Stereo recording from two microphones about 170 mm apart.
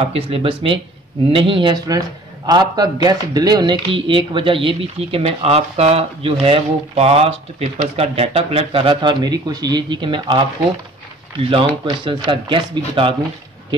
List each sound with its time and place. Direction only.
0.1 s a man's voice: 35° right (ahead or behind)
11.5 s speech: 30° right (ahead or behind)